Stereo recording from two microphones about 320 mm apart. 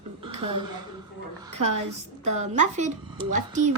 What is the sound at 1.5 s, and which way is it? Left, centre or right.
Speech, right.